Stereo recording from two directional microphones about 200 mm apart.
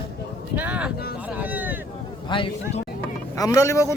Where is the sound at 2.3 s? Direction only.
25° left (ahead or behind).